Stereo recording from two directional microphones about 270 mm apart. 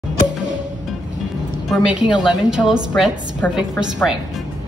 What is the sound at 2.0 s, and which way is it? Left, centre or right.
A woman's voice, centre.